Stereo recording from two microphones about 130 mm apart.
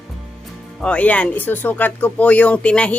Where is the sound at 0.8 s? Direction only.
10° left (ahead or behind).